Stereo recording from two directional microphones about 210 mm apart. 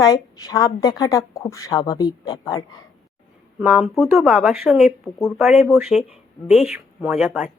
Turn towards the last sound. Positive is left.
turn(degrees=-5)  # may be behind; listen again after turning